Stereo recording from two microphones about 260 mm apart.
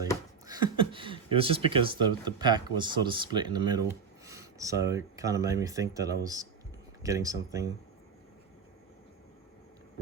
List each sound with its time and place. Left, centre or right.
0.4 s speech: centre